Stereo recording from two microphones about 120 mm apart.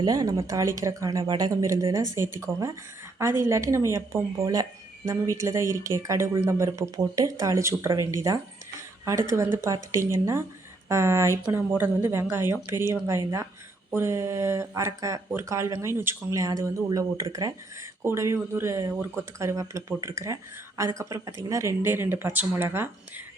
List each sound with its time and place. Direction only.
0.0 s speech: 30° right (ahead or behind)
1.2 s speech: 35° right (ahead or behind); by 23.2 s 20° right (ahead or behind)